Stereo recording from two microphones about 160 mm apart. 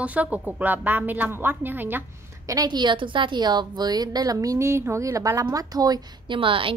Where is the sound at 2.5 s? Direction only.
25° right (ahead or behind).